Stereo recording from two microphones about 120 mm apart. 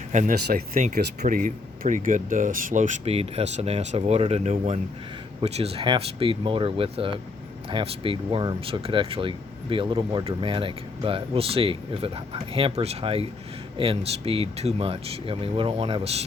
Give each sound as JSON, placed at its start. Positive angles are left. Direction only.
{"t": 0.1, "sound": "speech", "side_deg": -90}
{"t": 3.0, "sound": "speech", "side_deg": -55}
{"t": 5.4, "sound": "speech", "side_deg": -60}